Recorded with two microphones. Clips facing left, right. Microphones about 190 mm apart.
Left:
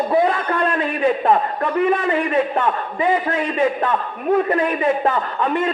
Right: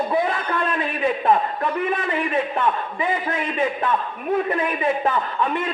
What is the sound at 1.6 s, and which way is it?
A man's voice, 40° left (ahead or behind).